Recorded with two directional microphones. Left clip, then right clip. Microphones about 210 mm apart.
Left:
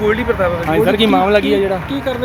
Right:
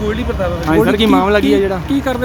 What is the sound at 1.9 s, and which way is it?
Speech, 50° right (ahead or behind).